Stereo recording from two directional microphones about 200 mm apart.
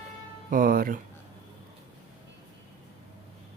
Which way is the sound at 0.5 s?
45° right (ahead or behind).